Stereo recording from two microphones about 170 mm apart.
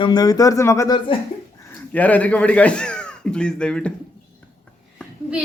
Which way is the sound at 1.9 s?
10° left (ahead or behind).